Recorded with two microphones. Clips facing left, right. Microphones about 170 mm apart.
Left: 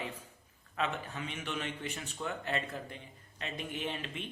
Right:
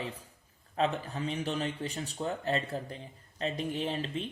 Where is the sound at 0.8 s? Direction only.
35° right (ahead or behind).